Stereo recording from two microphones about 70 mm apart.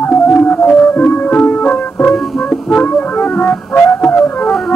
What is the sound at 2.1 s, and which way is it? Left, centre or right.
Music, centre.